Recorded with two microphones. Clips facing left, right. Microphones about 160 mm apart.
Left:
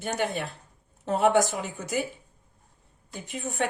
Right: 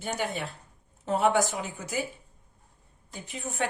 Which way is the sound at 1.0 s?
55° left (ahead or behind).